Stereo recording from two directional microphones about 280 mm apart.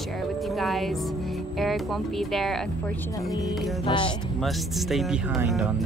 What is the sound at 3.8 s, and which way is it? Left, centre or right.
Music, centre.